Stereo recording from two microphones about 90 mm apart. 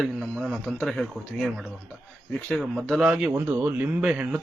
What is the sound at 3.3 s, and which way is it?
A man's voice, 20° right (ahead or behind).